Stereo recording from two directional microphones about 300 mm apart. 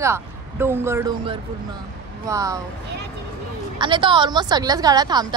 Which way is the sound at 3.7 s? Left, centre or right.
Centre.